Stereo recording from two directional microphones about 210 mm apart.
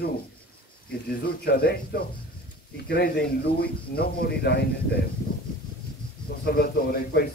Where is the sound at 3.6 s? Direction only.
50° left (ahead or behind).